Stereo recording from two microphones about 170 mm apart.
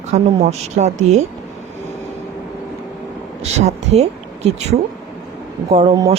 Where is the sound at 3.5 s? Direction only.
40° right (ahead or behind).